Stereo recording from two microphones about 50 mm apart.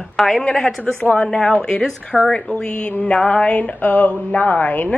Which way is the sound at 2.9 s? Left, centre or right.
Left.